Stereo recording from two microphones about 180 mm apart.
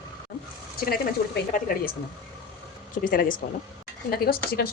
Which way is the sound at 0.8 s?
55° left (ahead or behind).